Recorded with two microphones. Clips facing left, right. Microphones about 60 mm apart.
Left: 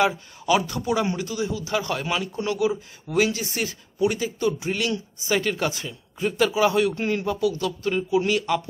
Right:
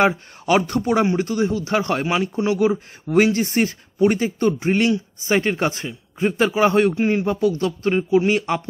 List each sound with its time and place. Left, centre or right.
0.0 s a man's voice: right
2.0 s speech: right
2.6 s a man's voice: right